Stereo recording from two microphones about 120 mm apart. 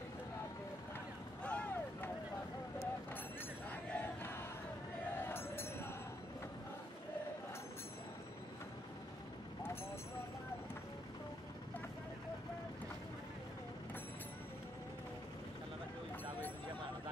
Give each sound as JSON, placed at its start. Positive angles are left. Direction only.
{"t": 1.4, "sound": "vehicle", "side_deg": 10}
{"t": 3.7, "sound": "crowd", "side_deg": 15}
{"t": 5.3, "sound": "music", "side_deg": 20}